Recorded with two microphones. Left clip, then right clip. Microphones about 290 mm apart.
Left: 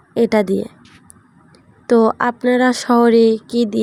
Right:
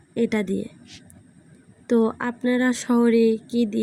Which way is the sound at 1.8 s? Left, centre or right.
Centre.